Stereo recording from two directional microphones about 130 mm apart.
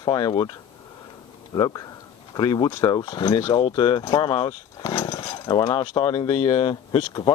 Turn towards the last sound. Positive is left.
turn(degrees=40)  # may be behind; listen again after turning